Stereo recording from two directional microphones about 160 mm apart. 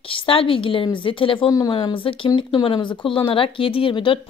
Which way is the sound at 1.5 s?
25° left (ahead or behind).